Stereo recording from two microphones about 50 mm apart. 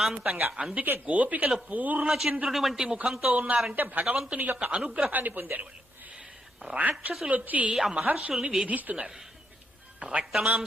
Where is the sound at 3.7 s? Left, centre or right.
Right.